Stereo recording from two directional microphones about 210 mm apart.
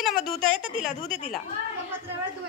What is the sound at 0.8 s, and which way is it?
Speech, 40° left (ahead or behind).